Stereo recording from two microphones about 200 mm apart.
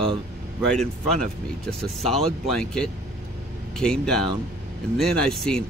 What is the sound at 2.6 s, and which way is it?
Speech, 5° left (ahead or behind).